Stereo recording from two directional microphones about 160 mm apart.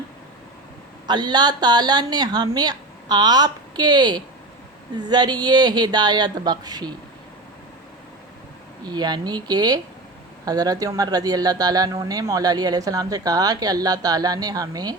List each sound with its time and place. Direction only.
1.0 s speech: 25° right (ahead or behind)
8.9 s speech: 25° right (ahead or behind)